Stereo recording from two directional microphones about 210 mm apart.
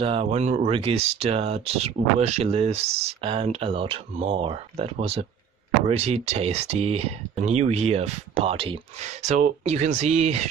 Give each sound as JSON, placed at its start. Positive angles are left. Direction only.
{"t": 0.0, "sound": "speech", "side_deg": -30}